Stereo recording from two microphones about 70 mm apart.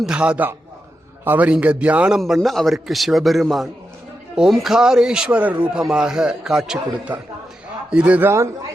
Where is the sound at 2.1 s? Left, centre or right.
Centre.